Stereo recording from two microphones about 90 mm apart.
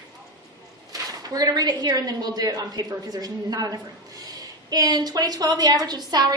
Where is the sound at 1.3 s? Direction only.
45° right (ahead or behind).